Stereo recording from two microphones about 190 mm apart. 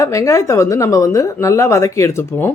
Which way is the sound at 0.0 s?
15° left (ahead or behind).